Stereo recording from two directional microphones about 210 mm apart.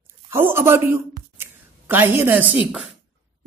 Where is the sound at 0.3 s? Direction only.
10° right (ahead or behind).